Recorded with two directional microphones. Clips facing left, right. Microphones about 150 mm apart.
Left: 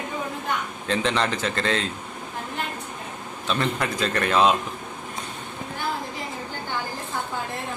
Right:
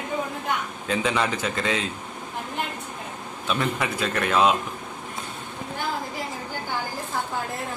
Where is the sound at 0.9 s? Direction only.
5° right (ahead or behind).